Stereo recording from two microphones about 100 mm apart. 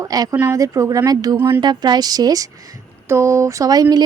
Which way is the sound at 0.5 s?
35° right (ahead or behind).